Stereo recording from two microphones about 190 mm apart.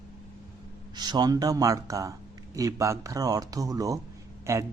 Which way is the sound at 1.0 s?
20° right (ahead or behind).